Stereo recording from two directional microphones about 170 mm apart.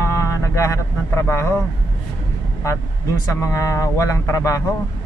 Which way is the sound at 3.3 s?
15° left (ahead or behind).